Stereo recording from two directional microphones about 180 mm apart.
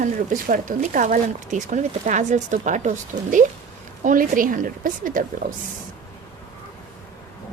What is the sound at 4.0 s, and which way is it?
Speech, 50° right (ahead or behind).